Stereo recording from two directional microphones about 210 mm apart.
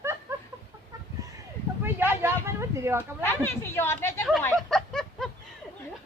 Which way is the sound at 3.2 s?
10° left (ahead or behind).